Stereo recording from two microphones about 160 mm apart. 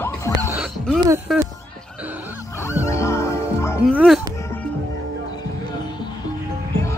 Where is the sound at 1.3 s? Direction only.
Centre (ahead or behind).